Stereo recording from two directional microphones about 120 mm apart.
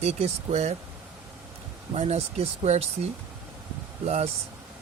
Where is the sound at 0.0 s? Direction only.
65° right (ahead or behind).